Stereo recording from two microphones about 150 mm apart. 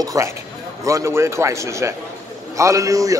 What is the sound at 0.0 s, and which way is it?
A man's voice, 25° right (ahead or behind).